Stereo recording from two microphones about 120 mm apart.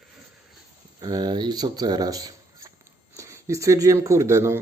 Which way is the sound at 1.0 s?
35° right (ahead or behind).